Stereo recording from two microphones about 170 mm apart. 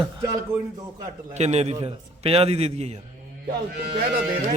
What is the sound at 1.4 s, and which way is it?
A man's voice, 40° right (ahead or behind).